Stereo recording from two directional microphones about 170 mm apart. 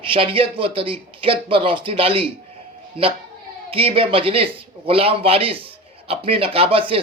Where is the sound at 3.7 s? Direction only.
35° right (ahead or behind).